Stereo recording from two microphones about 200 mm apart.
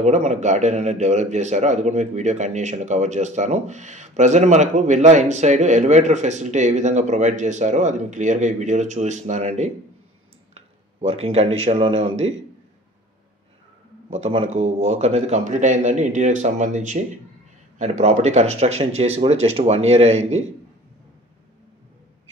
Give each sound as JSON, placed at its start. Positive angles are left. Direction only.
{"t": 0.0, "sound": "a man's voice", "side_deg": -35}
{"t": 14.1, "sound": "a man's voice", "side_deg": -30}